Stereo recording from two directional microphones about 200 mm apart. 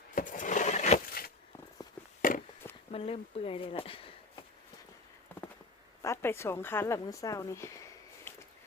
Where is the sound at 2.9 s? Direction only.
30° left (ahead or behind).